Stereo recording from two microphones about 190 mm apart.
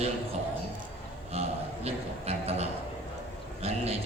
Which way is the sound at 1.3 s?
35° right (ahead or behind).